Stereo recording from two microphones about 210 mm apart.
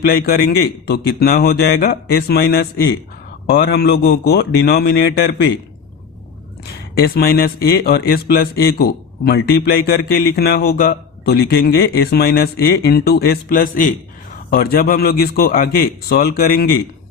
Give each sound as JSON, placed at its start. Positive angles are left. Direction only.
{"t": 0.1, "sound": "a man's voice", "side_deg": 45}
{"t": 7.0, "sound": "a man's voice", "side_deg": 45}